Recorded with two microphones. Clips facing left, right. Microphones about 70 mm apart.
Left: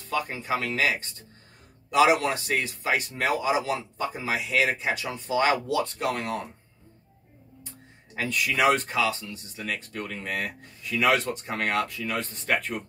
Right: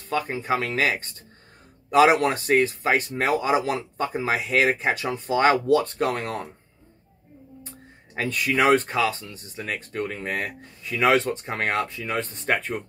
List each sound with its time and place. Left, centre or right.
0.1 s speech: right
8.2 s speech: right